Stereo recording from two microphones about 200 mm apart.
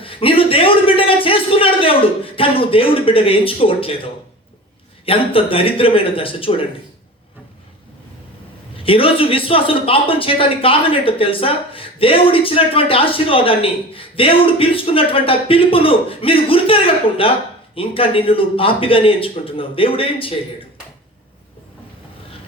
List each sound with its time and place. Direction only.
0.0 s a man's voice: 25° left (ahead or behind)
8.7 s speech: 25° left (ahead or behind)